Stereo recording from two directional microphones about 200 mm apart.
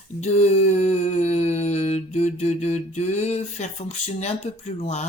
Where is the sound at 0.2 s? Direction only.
35° left (ahead or behind).